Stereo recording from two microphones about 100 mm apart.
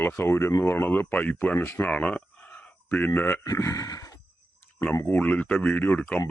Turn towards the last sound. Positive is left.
turn(degrees=15)  # may be behind; listen again after turning